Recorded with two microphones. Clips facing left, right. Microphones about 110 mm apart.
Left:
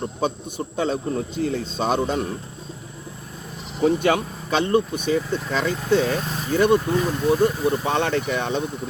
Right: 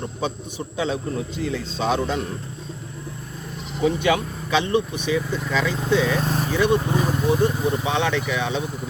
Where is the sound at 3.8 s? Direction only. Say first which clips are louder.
Left 1 dB; 45° left (ahead or behind).